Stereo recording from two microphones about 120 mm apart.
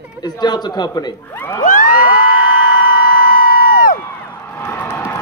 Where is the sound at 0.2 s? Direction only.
35° left (ahead or behind).